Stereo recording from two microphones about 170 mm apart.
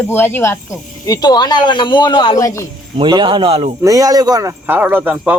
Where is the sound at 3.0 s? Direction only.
25° right (ahead or behind).